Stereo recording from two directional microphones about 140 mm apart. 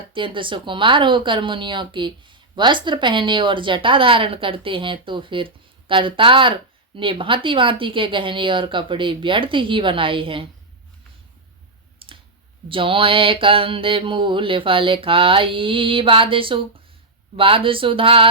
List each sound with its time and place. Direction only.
0.1 s mantra: 35° right (ahead or behind)
12.0 s clicking: 40° right (ahead or behind)
12.6 s mantra: 40° right (ahead or behind)